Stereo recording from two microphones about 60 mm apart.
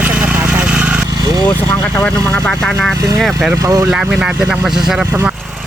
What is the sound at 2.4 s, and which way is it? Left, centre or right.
Speech, centre.